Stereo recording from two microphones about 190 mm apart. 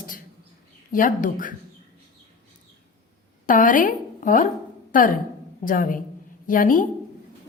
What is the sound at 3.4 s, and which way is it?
A woman's voice, 45° left (ahead or behind).